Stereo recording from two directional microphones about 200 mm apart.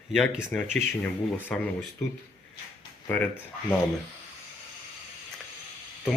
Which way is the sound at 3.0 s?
10° left (ahead or behind).